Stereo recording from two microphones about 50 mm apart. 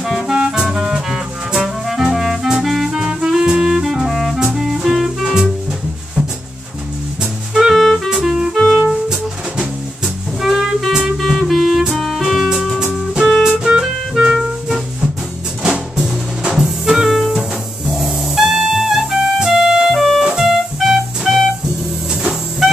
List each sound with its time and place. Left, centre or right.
0.0 s music: centre
7.5 s music: centre
8.1 s music: centre
8.5 s music: centre
16.5 s music: centre